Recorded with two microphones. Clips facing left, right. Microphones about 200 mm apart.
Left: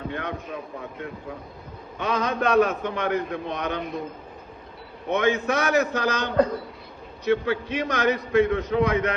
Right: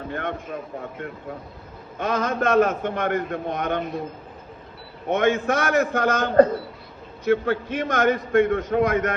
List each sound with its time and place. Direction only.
0.1 s a man's voice: 50° right (ahead or behind)
5.0 s a man's voice: 50° right (ahead or behind)